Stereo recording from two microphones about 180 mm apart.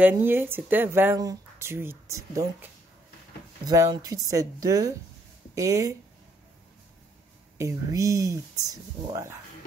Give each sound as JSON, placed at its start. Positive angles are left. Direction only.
{"t": 0.0, "sound": "speech", "side_deg": -10}
{"t": 7.5, "sound": "speech", "side_deg": -20}